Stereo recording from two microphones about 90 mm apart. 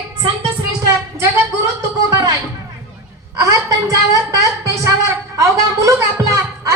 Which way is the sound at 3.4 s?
35° right (ahead or behind).